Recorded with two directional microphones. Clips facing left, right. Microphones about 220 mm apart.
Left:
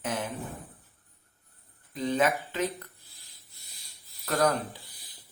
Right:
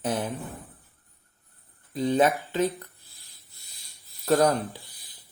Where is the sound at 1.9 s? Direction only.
35° right (ahead or behind).